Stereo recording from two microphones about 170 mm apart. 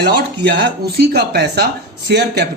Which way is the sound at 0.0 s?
90° right.